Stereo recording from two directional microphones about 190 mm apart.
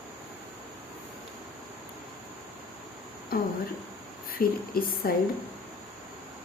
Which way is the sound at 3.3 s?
50° left (ahead or behind).